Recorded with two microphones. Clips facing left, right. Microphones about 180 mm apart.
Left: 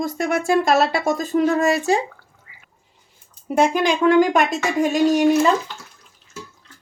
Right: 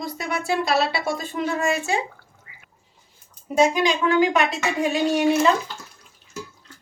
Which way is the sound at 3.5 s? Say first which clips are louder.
Left 1 dB; 55° left (ahead or behind).